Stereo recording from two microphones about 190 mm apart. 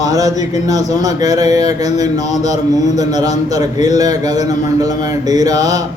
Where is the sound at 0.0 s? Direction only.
20° right (ahead or behind).